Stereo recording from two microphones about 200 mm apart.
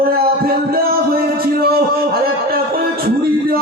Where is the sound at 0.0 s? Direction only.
50° right (ahead or behind).